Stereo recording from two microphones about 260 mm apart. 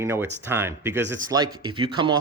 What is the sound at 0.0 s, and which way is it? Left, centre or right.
Speech, centre.